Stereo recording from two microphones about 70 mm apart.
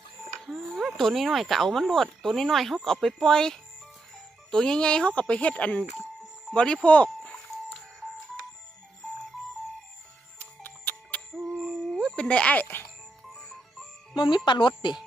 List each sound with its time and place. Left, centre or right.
0.3 s speech: centre
10.3 s music: left
11.6 s a sound: centre; by 12.8 s left
14.1 s speech: left